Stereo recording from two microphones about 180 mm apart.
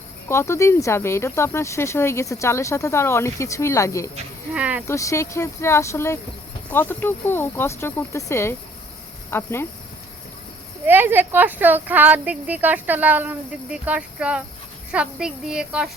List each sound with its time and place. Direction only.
0.3 s speech: 15° left (ahead or behind)
4.5 s speech: 5° right (ahead or behind)
4.9 s speech: 15° left (ahead or behind)
10.8 s a woman's voice: 10° right (ahead or behind)